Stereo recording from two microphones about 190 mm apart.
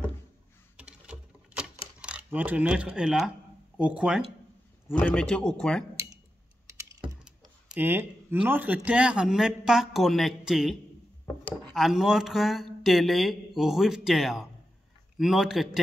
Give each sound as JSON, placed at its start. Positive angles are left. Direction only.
{"t": 0.7, "sound": "camera", "side_deg": -5}
{"t": 3.7, "sound": "speech", "side_deg": -5}
{"t": 4.8, "sound": "speech", "side_deg": 5}
{"t": 6.7, "sound": "computer keyboard", "side_deg": -15}
{"t": 7.6, "sound": "speech", "side_deg": -10}